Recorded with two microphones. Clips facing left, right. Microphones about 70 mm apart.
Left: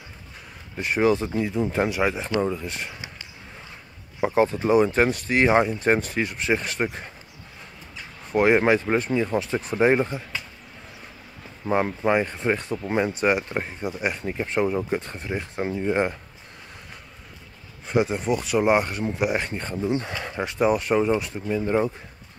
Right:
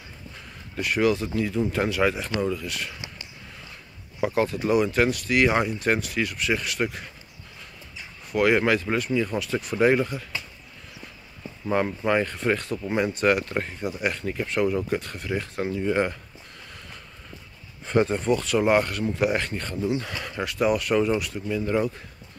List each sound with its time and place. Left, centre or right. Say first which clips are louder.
0.7 s speech: left 2 dB; left
4.2 s speech: left 3 dB; left
8.3 s speech: left 2 dB; left
11.6 s speech: left 2 dB; left
17.8 s speech: right 1 dB; centre; by 21.9 s left